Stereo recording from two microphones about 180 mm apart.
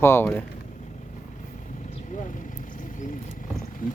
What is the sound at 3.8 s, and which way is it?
Speech, 50° left (ahead or behind).